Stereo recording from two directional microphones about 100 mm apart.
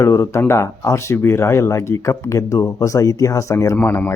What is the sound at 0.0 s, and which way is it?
Speech, 30° left (ahead or behind).